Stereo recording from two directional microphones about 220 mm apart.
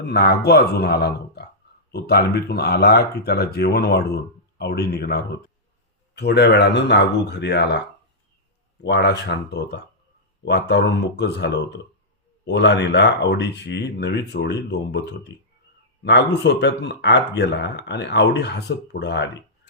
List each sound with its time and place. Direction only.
0.1 s speech: 45° left (ahead or behind)
8.8 s speech: 50° left (ahead or behind)